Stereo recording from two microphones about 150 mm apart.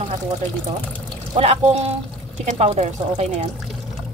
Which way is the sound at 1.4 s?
45° right (ahead or behind).